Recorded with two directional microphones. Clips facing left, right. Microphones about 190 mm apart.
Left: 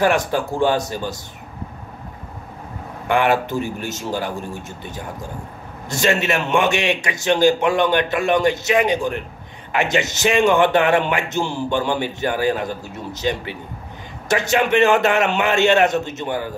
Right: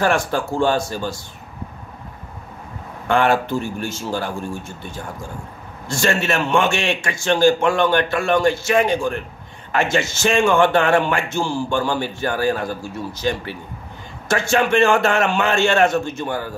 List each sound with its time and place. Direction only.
0.0 s a man's voice: 15° left (ahead or behind)
3.1 s a man's voice: 15° left (ahead or behind)
5.9 s a man's voice: 20° left (ahead or behind)